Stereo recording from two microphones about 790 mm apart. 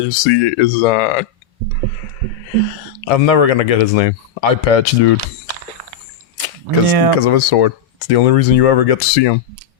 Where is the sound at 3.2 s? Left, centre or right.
Left.